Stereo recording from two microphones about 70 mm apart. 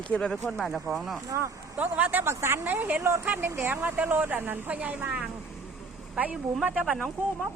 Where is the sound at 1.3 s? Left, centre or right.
Right.